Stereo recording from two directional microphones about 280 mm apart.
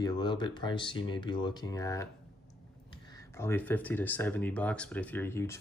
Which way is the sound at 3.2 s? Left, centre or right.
Centre.